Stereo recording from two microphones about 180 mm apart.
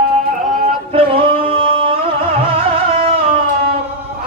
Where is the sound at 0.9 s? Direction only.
30° right (ahead or behind).